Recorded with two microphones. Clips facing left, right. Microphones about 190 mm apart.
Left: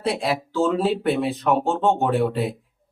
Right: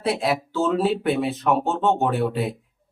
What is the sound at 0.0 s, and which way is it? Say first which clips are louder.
Speech: right 1 dB; centre (ahead or behind).